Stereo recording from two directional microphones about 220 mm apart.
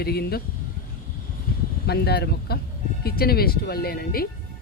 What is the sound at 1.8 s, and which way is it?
Speech, 45° left (ahead or behind).